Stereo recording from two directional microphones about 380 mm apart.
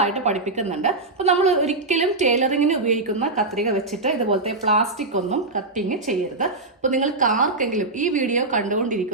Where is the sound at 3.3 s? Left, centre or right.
Centre.